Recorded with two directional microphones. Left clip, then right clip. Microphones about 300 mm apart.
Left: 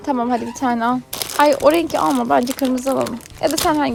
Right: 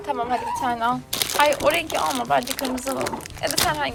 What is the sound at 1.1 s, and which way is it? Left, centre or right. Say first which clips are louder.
Speech: left 5 dB; centre.